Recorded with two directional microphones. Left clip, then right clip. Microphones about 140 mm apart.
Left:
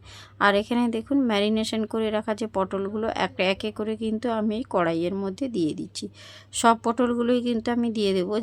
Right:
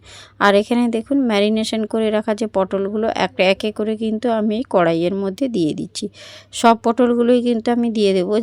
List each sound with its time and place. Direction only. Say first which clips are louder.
0.3 s speech: right 7 dB; 40° right (ahead or behind)